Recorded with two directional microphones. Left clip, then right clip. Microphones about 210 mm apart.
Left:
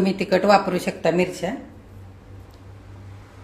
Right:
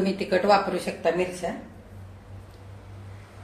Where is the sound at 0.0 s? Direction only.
30° left (ahead or behind).